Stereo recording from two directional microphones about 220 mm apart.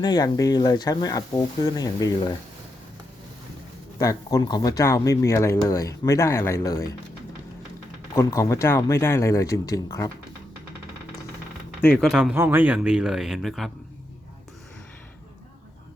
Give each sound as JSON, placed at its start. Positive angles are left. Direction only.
{"t": 0.0, "sound": "speech", "side_deg": 15}
{"t": 3.9, "sound": "speech", "side_deg": 15}
{"t": 8.1, "sound": "speech", "side_deg": 15}
{"t": 11.9, "sound": "speech", "side_deg": 0}